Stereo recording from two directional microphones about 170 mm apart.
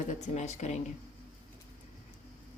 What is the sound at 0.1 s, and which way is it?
Speech, 45° left (ahead or behind).